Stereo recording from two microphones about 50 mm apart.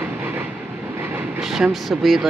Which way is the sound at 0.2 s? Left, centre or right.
Right.